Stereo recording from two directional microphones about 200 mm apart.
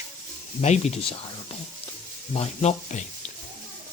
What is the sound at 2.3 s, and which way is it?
Speech, 30° left (ahead or behind).